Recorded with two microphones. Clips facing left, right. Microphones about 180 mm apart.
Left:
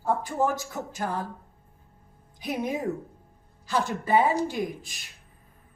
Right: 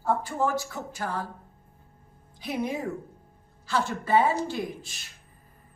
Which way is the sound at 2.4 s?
15° left (ahead or behind).